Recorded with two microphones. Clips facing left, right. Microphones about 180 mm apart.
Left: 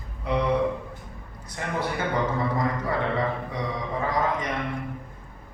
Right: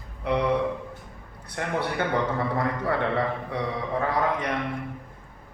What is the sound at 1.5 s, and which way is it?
Speech, 65° right (ahead or behind).